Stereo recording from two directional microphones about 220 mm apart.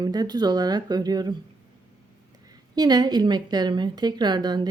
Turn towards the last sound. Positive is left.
turn(degrees=-20)  # may be behind; listen again after turning